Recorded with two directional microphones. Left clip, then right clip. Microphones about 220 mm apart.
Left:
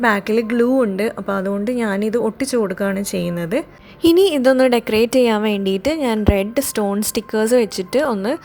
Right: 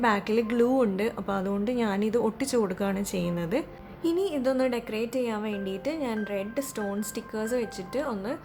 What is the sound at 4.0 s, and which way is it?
A woman's voice, 40° left (ahead or behind).